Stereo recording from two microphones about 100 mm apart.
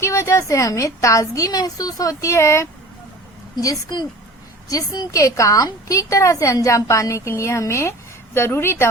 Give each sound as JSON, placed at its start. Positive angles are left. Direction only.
{"t": 0.0, "sound": "a woman's voice", "side_deg": 30}